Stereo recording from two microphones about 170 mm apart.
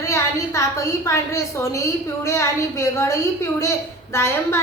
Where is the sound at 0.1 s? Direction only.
15° left (ahead or behind).